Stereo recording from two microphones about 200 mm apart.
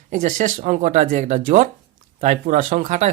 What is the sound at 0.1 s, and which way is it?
Speech, 40° right (ahead or behind).